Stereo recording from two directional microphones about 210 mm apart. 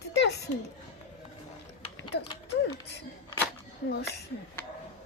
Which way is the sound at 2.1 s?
50° left (ahead or behind).